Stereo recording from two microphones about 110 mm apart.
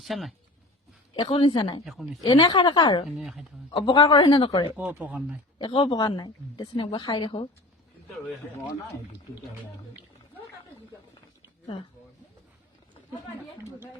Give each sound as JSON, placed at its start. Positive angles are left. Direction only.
{"t": 0.0, "sound": "speech", "side_deg": 0}
{"t": 1.1, "sound": "a woman's voice", "side_deg": 50}
{"t": 1.8, "sound": "speech", "side_deg": -5}
{"t": 2.2, "sound": "a woman's voice", "side_deg": 40}
{"t": 3.1, "sound": "speech", "side_deg": -5}
{"t": 3.8, "sound": "a woman's voice", "side_deg": 45}
{"t": 4.8, "sound": "speech", "side_deg": -15}
{"t": 5.6, "sound": "a woman's voice", "side_deg": 45}